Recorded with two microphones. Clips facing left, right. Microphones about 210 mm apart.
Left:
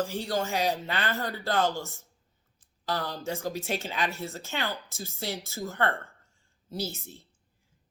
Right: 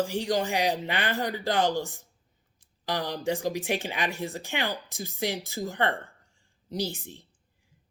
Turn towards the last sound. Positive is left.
turn(degrees=-15)  # may be behind; listen again after turning